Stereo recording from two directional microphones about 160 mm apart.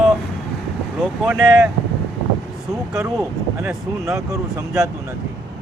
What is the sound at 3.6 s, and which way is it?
Speech, 15° right (ahead or behind).